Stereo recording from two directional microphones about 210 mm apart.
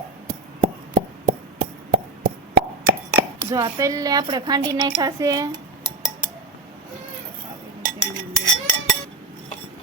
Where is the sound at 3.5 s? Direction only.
15° right (ahead or behind).